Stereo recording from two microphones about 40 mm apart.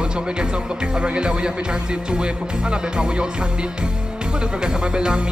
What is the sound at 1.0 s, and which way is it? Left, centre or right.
Music, right.